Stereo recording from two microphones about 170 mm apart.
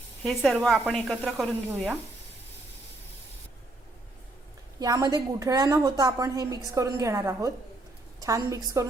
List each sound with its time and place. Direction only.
0.2 s speech: centre (ahead or behind)
4.8 s a woman's voice: 20° right (ahead or behind)